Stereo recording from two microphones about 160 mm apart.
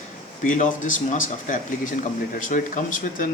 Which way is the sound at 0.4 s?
50° left (ahead or behind).